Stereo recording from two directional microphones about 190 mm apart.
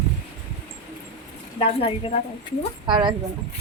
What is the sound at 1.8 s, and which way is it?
Speech, 30° left (ahead or behind).